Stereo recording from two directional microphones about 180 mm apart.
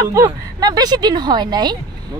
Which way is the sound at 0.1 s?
20° right (ahead or behind).